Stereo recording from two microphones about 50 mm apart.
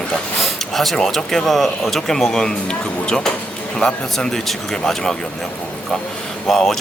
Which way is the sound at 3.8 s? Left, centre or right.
Centre.